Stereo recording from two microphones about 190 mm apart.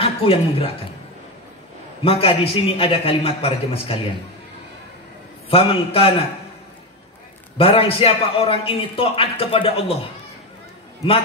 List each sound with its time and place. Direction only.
0.0 s a woman's voice: 30° left (ahead or behind)
2.0 s a man's voice: 30° left (ahead or behind)
5.5 s a man's voice: 30° left (ahead or behind)
7.5 s a man's voice: 30° left (ahead or behind)